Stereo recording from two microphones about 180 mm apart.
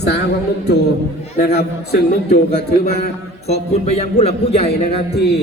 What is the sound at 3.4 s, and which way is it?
Speech, 35° left (ahead or behind).